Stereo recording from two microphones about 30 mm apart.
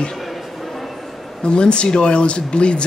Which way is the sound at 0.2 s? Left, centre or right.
Centre.